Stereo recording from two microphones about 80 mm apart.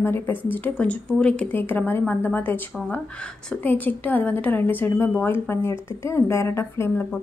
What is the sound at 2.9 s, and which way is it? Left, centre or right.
A woman's voice, centre.